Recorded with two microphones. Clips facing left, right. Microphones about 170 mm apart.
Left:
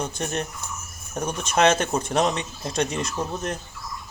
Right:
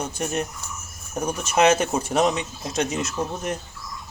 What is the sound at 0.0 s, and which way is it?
Speech, 10° right (ahead or behind).